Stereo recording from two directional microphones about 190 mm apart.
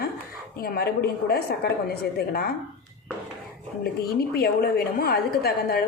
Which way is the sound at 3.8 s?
55° left (ahead or behind).